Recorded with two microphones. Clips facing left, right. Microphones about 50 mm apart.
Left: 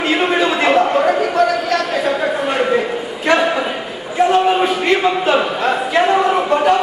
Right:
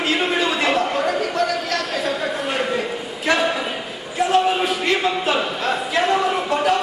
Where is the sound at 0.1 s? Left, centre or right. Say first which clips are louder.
Left 5 dB; centre.